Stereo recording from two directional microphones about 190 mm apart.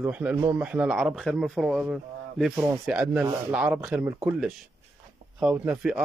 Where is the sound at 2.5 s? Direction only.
15° right (ahead or behind).